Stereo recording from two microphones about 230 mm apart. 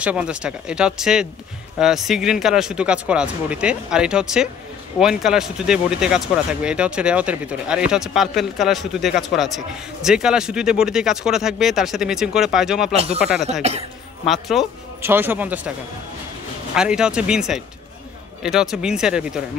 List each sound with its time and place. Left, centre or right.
0.0 s speech: centre
12.9 s speech: right
13.2 s speech: centre
13.5 s speech: right
14.2 s speech: centre
16.7 s speech: centre